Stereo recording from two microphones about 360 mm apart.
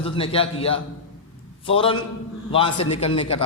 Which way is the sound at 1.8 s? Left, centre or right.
Centre.